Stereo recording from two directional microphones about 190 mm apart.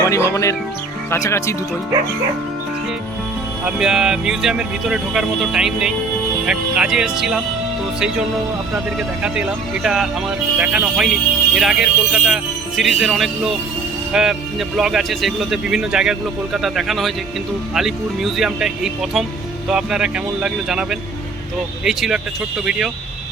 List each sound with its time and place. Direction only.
0.0 s speech: 15° left (ahead or behind)
3.8 s speech: 5° right (ahead or behind)
9.0 s speech: 5° right (ahead or behind)